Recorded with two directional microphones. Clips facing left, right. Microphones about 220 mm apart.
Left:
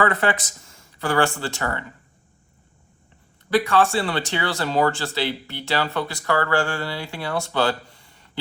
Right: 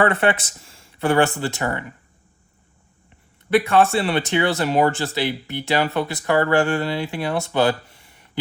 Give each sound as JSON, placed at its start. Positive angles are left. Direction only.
{"t": 0.0, "sound": "speech", "side_deg": -25}
{"t": 3.5, "sound": "speech", "side_deg": -25}